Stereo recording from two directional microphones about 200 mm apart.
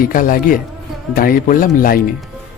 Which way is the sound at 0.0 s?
45° left (ahead or behind).